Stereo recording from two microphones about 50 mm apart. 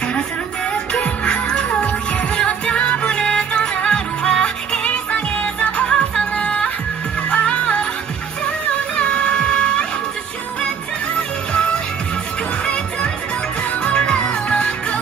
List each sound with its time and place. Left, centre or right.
1.0 s music: left
8.9 s music: left
11.1 s music: centre
13.8 s music: centre